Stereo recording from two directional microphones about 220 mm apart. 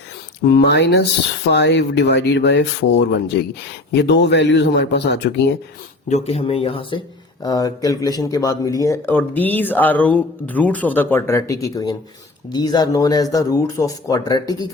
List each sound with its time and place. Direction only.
0.4 s a man's voice: 50° left (ahead or behind)
6.1 s speech: 30° left (ahead or behind)